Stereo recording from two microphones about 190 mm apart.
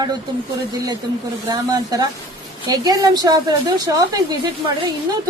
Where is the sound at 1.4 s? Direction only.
20° right (ahead or behind).